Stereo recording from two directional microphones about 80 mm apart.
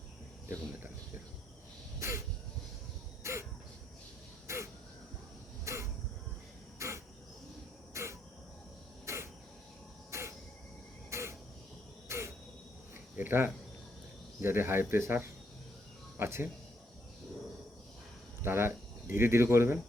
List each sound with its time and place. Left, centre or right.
2.0 s throat clearing: right
3.2 s a sound: right
4.4 s caw: right
5.6 s a sound: right
6.7 s crow: right
10.1 s a sound: right
11.1 s crow: right
13.1 s cricket: right
14.4 s speech: right
18.4 s speech: right